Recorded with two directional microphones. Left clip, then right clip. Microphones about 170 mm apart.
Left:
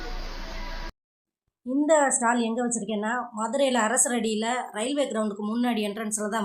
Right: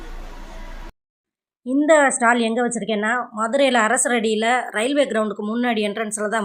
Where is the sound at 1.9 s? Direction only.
25° right (ahead or behind).